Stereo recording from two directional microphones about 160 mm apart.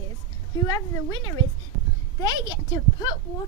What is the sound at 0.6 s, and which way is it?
A woman's voice, 25° left (ahead or behind).